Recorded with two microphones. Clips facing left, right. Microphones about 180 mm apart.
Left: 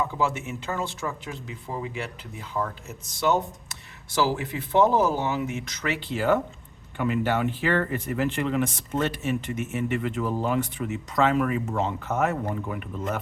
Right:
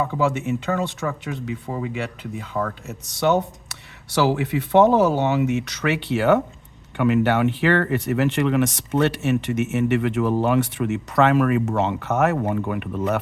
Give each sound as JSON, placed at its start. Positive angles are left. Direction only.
{"t": 0.0, "sound": "speech", "side_deg": -60}